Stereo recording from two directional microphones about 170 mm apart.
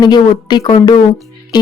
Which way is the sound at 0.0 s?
25° left (ahead or behind).